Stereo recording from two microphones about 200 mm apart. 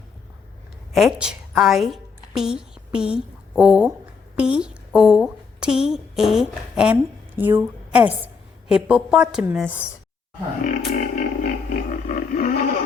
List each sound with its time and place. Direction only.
0.9 s a woman's voice: centre (ahead or behind)
10.9 s roar: 40° left (ahead or behind)